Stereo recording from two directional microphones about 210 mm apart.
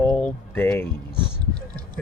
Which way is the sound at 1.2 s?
20° right (ahead or behind).